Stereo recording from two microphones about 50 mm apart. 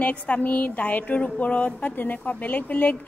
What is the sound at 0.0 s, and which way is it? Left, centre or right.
Speech, left.